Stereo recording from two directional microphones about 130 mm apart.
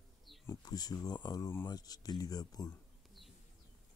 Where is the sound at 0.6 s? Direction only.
30° left (ahead or behind).